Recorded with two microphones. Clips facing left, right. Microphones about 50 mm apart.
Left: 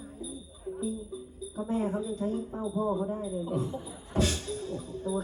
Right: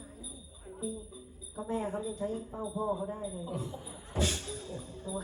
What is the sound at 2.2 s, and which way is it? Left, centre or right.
Speech, left.